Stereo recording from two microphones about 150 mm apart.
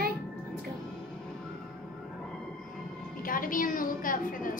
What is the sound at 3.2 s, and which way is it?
A woman's voice, 65° left (ahead or behind).